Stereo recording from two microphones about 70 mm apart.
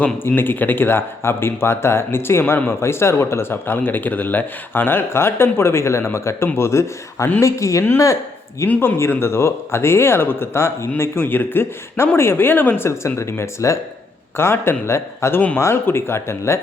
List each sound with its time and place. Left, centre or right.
0.0 s speech: left
8.6 s speech: left
9.0 s speech: left